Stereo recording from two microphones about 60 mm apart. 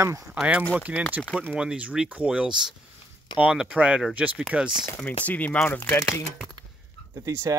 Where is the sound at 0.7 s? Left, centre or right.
Right.